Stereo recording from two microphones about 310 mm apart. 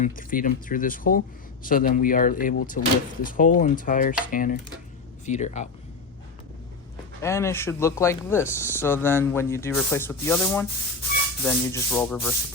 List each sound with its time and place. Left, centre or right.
0.0 s speech: left
7.2 s speech: centre